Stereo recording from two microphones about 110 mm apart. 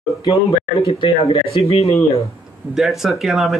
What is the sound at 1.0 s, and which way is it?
Speech, 65° left (ahead or behind).